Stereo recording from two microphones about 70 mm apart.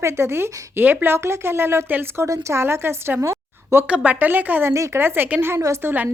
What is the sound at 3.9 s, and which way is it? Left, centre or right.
Speech, centre.